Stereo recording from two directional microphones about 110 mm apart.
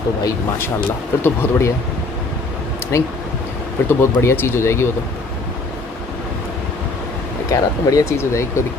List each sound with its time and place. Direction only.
1.2 s speech: 20° left (ahead or behind)
2.9 s speech: 25° left (ahead or behind)
7.5 s speech: 30° left (ahead or behind)